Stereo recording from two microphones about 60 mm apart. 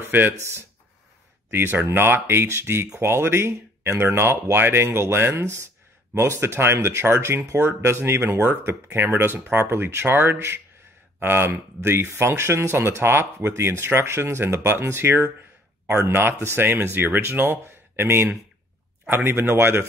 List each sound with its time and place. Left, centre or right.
0.4 s speech: right